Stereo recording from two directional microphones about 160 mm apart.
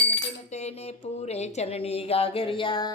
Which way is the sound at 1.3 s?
40° left (ahead or behind).